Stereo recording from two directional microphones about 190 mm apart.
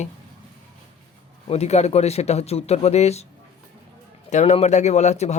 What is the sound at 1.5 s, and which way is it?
Speech, 35° left (ahead or behind).